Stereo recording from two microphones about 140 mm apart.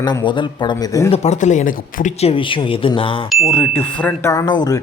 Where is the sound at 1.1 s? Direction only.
55° left (ahead or behind).